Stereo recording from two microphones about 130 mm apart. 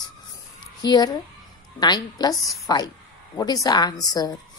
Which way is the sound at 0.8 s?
30° left (ahead or behind).